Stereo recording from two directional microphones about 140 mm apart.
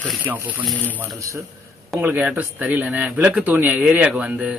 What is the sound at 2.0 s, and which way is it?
Speech, 10° right (ahead or behind).